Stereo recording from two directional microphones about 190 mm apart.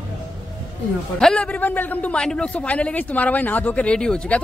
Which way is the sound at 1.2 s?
5° left (ahead or behind).